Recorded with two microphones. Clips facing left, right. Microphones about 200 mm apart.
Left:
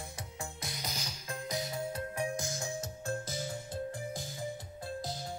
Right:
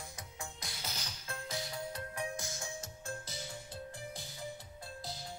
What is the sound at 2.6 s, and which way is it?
Music, 40° left (ahead or behind).